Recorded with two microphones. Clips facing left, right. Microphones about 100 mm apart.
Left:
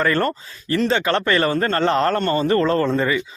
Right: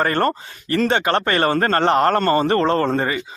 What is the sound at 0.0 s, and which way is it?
Speech, 45° right (ahead or behind).